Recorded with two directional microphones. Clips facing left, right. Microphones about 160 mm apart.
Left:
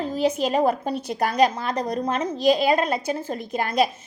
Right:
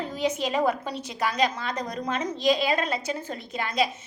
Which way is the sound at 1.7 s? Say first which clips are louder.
Left 6 dB; 30° left (ahead or behind).